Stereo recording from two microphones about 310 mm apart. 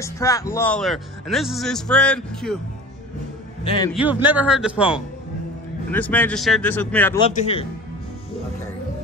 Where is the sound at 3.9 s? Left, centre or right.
Centre.